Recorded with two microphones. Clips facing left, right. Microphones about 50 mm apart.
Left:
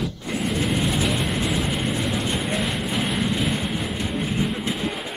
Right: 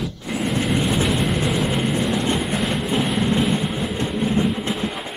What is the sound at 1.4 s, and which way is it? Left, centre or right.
Vehicle, centre.